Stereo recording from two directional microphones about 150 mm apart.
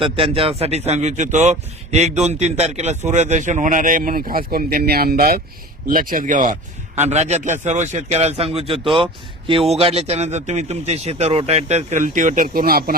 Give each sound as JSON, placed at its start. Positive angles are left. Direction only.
{"t": 0.0, "sound": "speech", "side_deg": -40}
{"t": 5.9, "sound": "a man's voice", "side_deg": -70}